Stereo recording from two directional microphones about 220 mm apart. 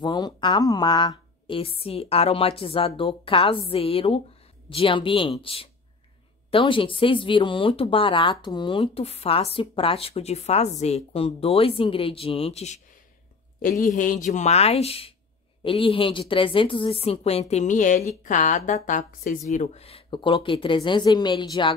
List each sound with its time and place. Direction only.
0.0 s speech: 20° left (ahead or behind)